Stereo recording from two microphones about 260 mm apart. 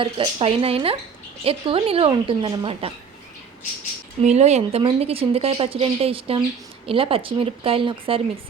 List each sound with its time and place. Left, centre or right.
0.0 s a woman's voice: right
4.2 s a woman's voice: right